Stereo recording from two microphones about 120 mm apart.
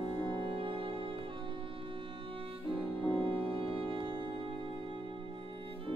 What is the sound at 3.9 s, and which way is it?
Music, 45° right (ahead or behind).